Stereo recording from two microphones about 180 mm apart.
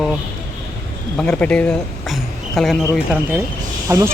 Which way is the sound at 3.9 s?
15° right (ahead or behind).